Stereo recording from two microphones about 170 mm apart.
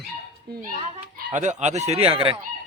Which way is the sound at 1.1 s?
45° right (ahead or behind).